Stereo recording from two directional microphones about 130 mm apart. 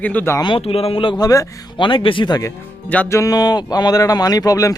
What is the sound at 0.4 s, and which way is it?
Speech, 45° left (ahead or behind).